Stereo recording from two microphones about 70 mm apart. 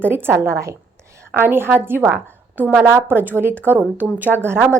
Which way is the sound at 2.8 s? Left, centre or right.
Right.